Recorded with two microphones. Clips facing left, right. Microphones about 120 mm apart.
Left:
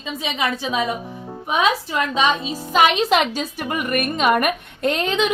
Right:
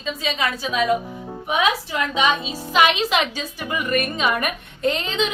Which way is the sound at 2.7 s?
45° left (ahead or behind).